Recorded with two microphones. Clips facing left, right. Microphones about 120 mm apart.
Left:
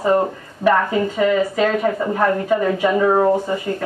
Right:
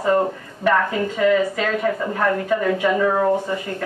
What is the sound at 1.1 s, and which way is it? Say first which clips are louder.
Speech: even; 10° left (ahead or behind).